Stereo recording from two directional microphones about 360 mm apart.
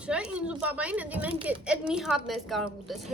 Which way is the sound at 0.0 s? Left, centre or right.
Centre.